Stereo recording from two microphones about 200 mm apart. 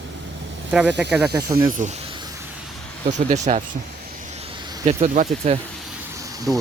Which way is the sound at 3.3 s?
35° right (ahead or behind).